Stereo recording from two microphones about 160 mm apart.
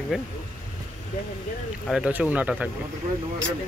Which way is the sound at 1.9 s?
5° right (ahead or behind).